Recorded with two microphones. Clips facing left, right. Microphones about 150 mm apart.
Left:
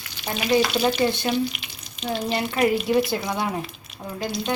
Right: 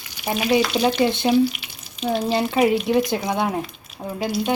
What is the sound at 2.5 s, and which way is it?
Stir, 10° right (ahead or behind).